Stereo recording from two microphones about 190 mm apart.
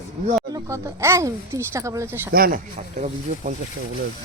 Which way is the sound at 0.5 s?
15° right (ahead or behind).